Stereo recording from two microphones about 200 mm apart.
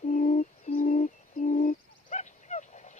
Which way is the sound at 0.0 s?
40° left (ahead or behind).